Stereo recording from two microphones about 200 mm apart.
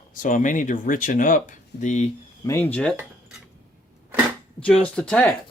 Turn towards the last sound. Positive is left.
turn(degrees=5)  # may be behind; listen again after turning